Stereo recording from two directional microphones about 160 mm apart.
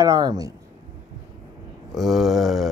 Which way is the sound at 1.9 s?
Centre (ahead or behind).